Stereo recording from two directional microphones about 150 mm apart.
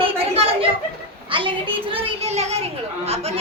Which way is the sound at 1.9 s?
40° right (ahead or behind).